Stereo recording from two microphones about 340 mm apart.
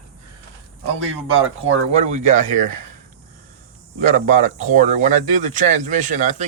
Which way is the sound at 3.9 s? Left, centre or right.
Right.